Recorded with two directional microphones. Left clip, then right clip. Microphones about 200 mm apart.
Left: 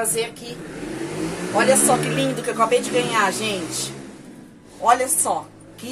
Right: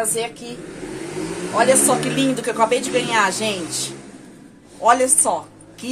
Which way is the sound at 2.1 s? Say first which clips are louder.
Right 2 dB; 35° right (ahead or behind).